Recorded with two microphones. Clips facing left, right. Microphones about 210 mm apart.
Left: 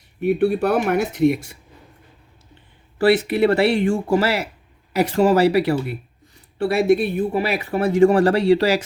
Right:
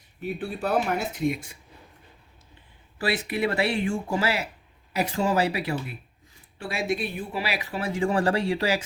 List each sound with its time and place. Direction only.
0.2 s speech: 65° left (ahead or behind)
3.0 s speech: 65° left (ahead or behind)
4.9 s speech: 85° left